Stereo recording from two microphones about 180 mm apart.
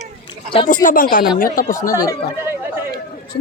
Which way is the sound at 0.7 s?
50° left (ahead or behind).